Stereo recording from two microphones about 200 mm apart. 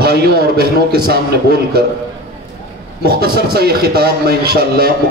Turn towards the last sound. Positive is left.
turn(degrees=-50)  # may be behind; listen again after turning